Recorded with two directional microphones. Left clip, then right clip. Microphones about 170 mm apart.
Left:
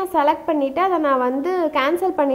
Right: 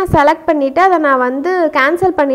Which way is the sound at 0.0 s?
30° right (ahead or behind).